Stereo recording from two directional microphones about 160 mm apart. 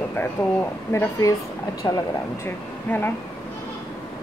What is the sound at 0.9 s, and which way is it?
A woman's voice, 15° left (ahead or behind).